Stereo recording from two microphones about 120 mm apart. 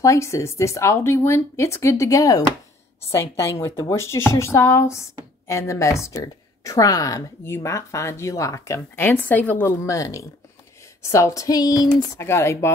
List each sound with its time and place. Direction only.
0.0 s a woman's voice: 25° left (ahead or behind)
12.0 s a woman's voice: 20° left (ahead or behind)